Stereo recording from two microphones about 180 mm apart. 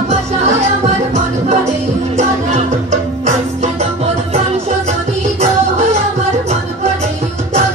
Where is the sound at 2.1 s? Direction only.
40° right (ahead or behind).